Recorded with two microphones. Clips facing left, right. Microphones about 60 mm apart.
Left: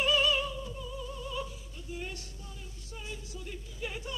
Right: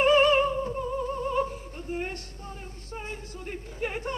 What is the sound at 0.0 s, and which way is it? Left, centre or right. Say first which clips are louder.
Opera: right 8 dB; right.